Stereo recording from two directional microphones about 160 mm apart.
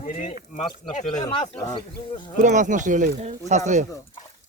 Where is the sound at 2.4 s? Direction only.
50° right (ahead or behind).